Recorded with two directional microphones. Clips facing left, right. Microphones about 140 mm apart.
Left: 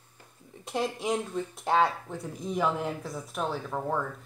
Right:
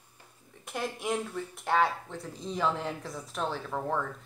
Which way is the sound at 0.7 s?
20° left (ahead or behind).